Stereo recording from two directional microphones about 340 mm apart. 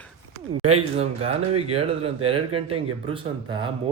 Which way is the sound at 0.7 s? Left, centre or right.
Centre.